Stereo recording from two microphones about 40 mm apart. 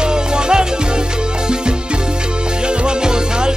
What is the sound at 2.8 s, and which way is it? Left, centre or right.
Music, right.